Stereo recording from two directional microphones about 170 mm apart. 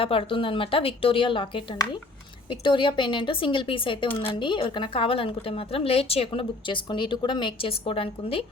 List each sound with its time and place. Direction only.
0.0 s a woman's voice: 35° left (ahead or behind)